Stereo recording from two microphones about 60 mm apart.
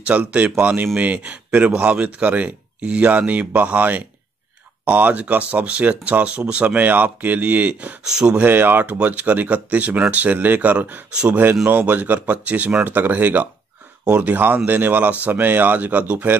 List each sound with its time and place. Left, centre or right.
0.0 s speech: right
8.0 s speech: centre
8.4 s speech: right
8.8 s speech: right